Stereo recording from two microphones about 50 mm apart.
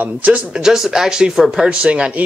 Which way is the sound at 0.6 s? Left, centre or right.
Centre.